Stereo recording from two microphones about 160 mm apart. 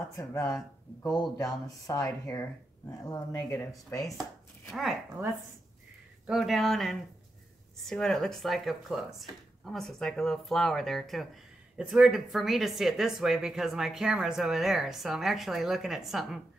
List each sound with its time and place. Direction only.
0.2 s speech: 20° left (ahead or behind)
4.2 s chopping: centre (ahead or behind)
5.2 s speech: 15° right (ahead or behind)
6.2 s speech: centre (ahead or behind)